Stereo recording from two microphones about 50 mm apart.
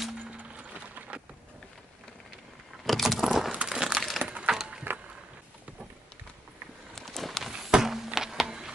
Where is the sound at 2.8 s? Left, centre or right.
Centre.